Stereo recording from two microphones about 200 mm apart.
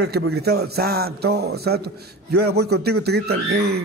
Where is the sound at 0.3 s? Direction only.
55° right (ahead or behind).